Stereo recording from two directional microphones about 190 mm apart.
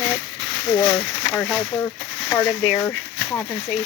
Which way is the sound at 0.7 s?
10° left (ahead or behind).